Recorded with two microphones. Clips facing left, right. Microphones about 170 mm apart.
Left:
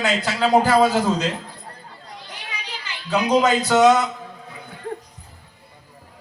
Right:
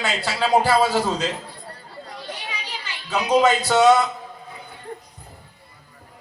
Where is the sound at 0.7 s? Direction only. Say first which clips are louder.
Left 2 dB; 40° left (ahead or behind).